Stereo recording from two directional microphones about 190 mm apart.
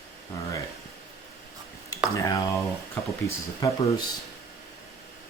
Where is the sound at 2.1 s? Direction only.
20° left (ahead or behind).